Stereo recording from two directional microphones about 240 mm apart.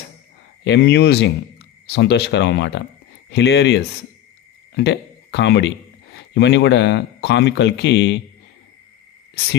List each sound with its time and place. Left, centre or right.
0.7 s speech: left